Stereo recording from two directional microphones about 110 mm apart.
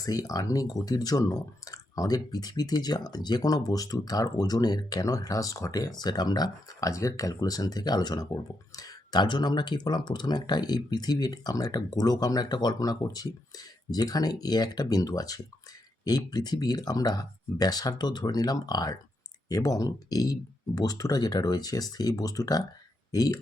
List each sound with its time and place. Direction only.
0.0 s speech: 35° left (ahead or behind)